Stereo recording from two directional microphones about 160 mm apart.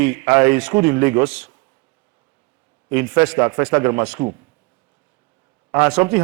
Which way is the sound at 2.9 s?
15° right (ahead or behind).